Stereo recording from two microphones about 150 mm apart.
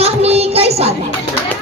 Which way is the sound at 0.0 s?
45° right (ahead or behind).